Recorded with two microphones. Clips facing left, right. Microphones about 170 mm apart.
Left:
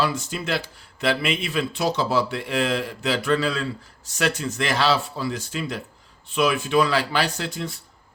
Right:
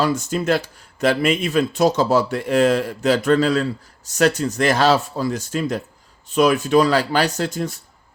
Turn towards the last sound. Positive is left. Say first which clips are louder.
# right 6 dB
turn(degrees=-45)  # may be behind; listen again after turning